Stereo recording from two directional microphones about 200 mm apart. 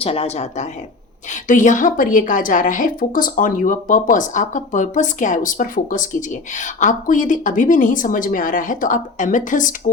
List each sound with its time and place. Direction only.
0.0 s a woman's voice: 30° left (ahead or behind)